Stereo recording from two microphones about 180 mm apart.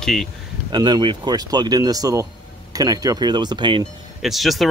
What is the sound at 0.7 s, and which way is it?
Speech, 25° right (ahead or behind).